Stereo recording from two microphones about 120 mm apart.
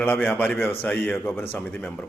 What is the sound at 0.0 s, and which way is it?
A man's voice, 15° left (ahead or behind).